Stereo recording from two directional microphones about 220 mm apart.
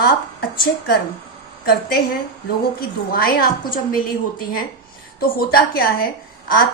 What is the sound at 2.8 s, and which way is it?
A woman's voice, 40° left (ahead or behind).